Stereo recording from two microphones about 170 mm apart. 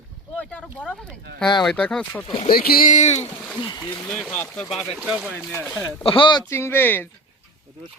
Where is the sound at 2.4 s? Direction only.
60° left (ahead or behind); by 3.2 s 40° left (ahead or behind).